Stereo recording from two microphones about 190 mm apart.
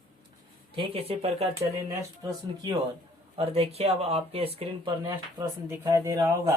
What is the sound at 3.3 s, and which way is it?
Speech, 30° right (ahead or behind).